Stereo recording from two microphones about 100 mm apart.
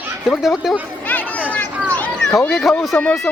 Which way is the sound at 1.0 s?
15° left (ahead or behind).